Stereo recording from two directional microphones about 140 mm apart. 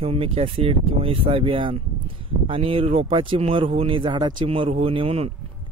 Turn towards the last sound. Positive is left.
turn(degrees=-45)  # may be behind; listen again after turning